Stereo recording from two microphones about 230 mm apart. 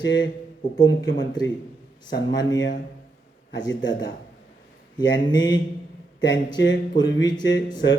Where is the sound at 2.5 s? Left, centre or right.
Left.